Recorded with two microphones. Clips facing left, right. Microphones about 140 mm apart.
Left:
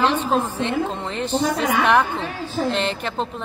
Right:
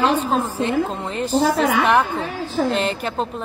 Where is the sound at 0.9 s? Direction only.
Centre (ahead or behind).